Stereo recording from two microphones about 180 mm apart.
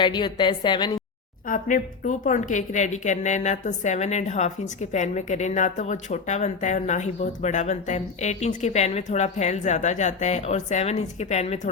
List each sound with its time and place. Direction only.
0.0 s a woman's voice: 25° left (ahead or behind)
1.5 s a woman's voice: 50° left (ahead or behind)